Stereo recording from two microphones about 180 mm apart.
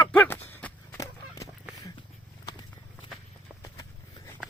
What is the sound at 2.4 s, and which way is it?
Walk, 25° left (ahead or behind).